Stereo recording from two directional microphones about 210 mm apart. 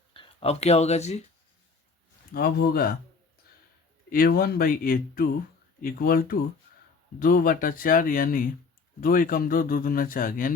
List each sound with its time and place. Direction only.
0.1 s speech: 25° left (ahead or behind)
2.3 s speech: 45° left (ahead or behind)
4.1 s speech: 45° left (ahead or behind)